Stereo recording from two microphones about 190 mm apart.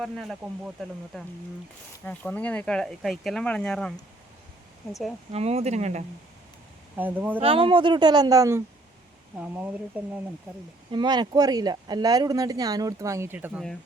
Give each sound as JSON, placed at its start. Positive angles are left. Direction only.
{"t": 0.0, "sound": "speech", "side_deg": 0}
{"t": 5.3, "sound": "speech", "side_deg": -35}
{"t": 6.9, "sound": "speech", "side_deg": -10}
{"t": 7.4, "sound": "speech", "side_deg": -30}
{"t": 10.9, "sound": "speech", "side_deg": -25}